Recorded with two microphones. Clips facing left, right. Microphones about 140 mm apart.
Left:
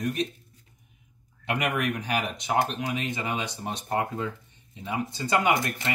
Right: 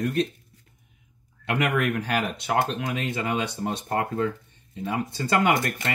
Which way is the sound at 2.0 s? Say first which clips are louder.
Right 3 dB; 55° right (ahead or behind).